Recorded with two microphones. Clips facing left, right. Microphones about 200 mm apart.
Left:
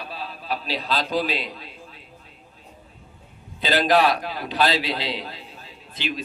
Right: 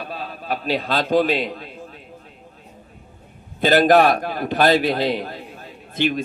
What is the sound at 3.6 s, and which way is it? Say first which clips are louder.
A man's voice: right 5 dB; 50° right (ahead or behind).